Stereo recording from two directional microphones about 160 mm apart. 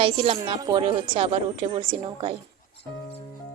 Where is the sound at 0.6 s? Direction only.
25° right (ahead or behind).